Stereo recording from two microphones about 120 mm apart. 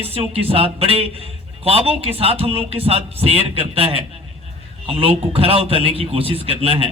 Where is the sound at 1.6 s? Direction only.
55° right (ahead or behind).